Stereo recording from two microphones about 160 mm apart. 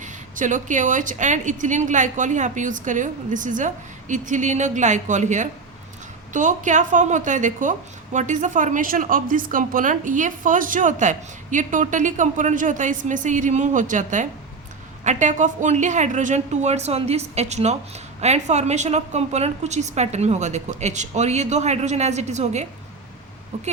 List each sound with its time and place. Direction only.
0.0 s a woman's voice: 50° right (ahead or behind)